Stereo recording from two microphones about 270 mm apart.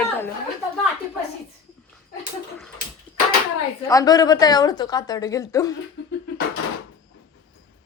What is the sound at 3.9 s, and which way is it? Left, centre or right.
Speech, centre.